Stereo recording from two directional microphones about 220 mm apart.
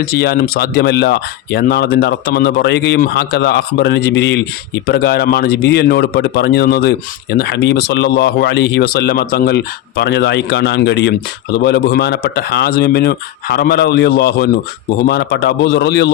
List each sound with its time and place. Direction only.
0.0 s speech: 45° left (ahead or behind)